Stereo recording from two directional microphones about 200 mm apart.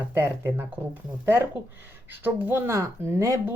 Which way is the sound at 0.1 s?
10° right (ahead or behind).